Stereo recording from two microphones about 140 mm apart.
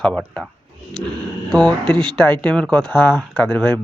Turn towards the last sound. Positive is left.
turn(degrees=10)  # may be behind; listen again after turning